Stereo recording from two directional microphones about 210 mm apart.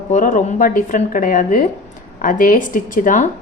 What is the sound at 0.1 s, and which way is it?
Speech, 35° left (ahead or behind).